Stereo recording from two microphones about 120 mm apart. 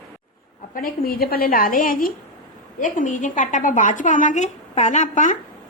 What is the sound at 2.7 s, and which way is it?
A woman's voice, 90° left.